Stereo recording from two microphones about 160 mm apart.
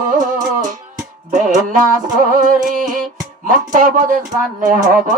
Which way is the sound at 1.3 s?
50° right (ahead or behind).